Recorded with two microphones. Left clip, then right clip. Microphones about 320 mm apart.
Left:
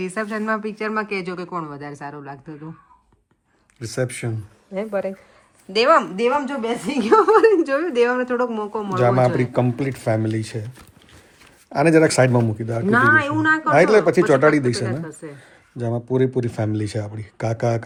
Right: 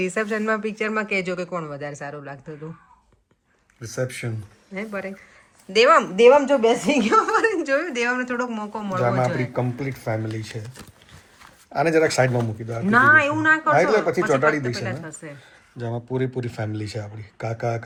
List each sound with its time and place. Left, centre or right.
0.0 s speech: centre
3.8 s speech: left
4.7 s speech: centre
9.0 s speech: left
11.7 s speech: left
12.9 s speech: centre
13.7 s speech: left
15.2 s speech: centre
15.9 s speech: left
16.1 s speech: left